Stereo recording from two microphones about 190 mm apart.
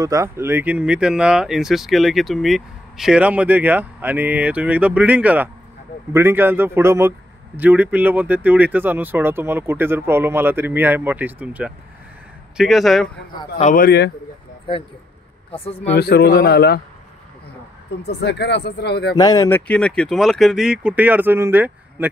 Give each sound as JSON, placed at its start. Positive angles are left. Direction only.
{"t": 0.0, "sound": "a man's voice", "side_deg": -15}
{"t": 13.6, "sound": "speech", "side_deg": 40}
{"t": 13.8, "sound": "speech", "side_deg": 60}
{"t": 15.5, "sound": "speech", "side_deg": 30}
{"t": 15.9, "sound": "speech", "side_deg": 55}
{"t": 18.0, "sound": "speech", "side_deg": 65}
{"t": 19.1, "sound": "speech", "side_deg": 20}
{"t": 19.7, "sound": "speech", "side_deg": 5}